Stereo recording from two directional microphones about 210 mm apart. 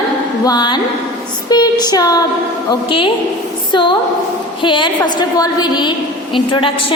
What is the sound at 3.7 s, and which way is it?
A woman's voice, 20° left (ahead or behind).